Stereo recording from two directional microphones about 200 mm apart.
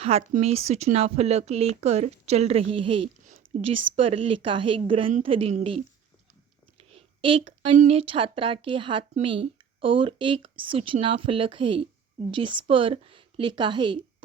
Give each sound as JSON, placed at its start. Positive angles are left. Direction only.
{"t": 0.0, "sound": "a woman's voice", "side_deg": -30}
{"t": 6.9, "sound": "a woman's voice", "side_deg": -25}